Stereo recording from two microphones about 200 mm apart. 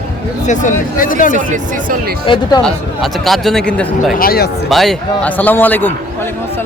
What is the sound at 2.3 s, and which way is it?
Speech, 25° left (ahead or behind).